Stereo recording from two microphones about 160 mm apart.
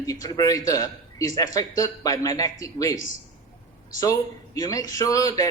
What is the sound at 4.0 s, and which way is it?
A man's voice, 20° left (ahead or behind).